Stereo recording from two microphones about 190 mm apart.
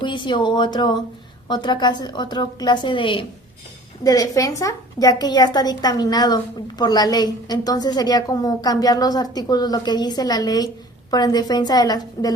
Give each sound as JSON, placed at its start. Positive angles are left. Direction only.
{"t": 0.0, "sound": "a woman's voice", "side_deg": 25}